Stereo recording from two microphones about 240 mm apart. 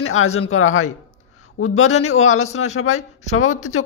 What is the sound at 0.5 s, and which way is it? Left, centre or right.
Speech, left.